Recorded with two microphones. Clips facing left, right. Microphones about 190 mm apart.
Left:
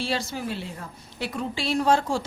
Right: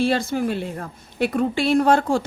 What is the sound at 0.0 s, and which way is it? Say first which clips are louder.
A woman's voice: right 8 dB; 55° right (ahead or behind).